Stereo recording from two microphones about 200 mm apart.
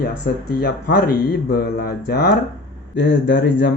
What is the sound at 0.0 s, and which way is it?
Speech, 50° left (ahead or behind).